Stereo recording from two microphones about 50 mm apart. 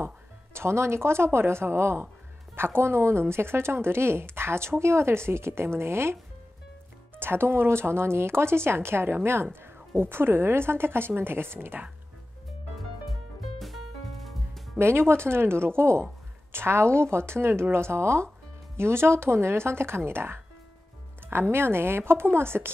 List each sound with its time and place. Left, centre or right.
0.0 s speech: right
7.2 s speech: right
13.6 s music: centre
14.8 s speech: right